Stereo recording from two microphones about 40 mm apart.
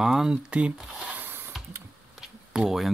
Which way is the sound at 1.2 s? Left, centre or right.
Right.